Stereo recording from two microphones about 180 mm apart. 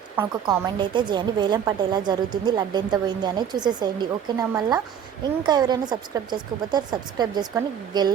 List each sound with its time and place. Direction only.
0.4 s a woman's voice: 25° right (ahead or behind)